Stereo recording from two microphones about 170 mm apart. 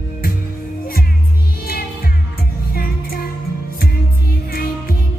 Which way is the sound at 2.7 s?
60° left (ahead or behind).